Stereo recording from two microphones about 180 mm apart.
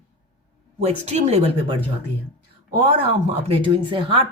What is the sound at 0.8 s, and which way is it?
Speech, 35° right (ahead or behind).